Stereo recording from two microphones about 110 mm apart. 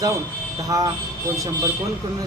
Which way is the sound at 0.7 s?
35° right (ahead or behind).